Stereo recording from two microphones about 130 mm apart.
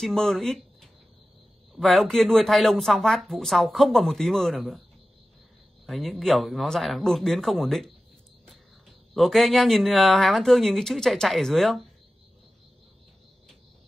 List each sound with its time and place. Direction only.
0.0 s speech: 5° left (ahead or behind)
5.9 s speech: centre (ahead or behind)
9.1 s speech: centre (ahead or behind)